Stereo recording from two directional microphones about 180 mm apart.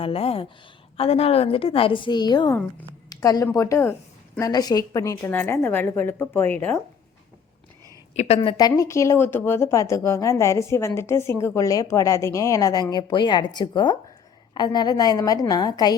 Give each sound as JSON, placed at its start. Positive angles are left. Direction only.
{"t": 0.0, "sound": "a woman's voice", "side_deg": 30}
{"t": 8.1, "sound": "a woman's voice", "side_deg": 40}
{"t": 8.4, "sound": "a woman's voice", "side_deg": 25}